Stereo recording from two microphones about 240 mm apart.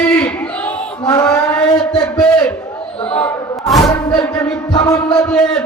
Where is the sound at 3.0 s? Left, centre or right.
Centre.